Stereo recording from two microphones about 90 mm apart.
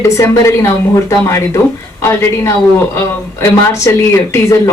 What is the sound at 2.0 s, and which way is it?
Speech, 30° left (ahead or behind).